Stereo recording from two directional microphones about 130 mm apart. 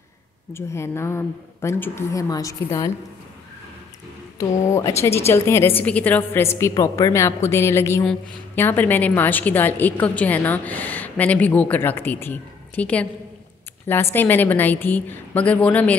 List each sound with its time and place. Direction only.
0.5 s a woman's voice: 20° left (ahead or behind)
4.4 s a woman's voice: 25° left (ahead or behind)
14.1 s a woman's voice: 15° left (ahead or behind)